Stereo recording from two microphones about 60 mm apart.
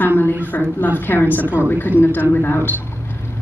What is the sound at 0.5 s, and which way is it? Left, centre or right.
Speech, left.